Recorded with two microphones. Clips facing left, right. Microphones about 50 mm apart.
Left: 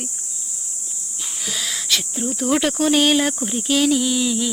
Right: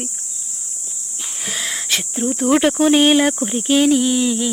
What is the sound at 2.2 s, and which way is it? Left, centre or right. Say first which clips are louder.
Speech: right 5 dB; right.